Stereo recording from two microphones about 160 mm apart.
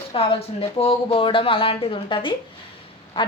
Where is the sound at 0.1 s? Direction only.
35° left (ahead or behind).